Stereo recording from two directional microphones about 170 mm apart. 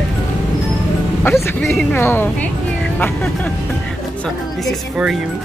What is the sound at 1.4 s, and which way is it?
Speech, 15° left (ahead or behind).